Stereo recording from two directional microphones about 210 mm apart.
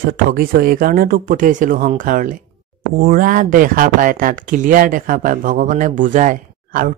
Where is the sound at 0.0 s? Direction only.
45° right (ahead or behind).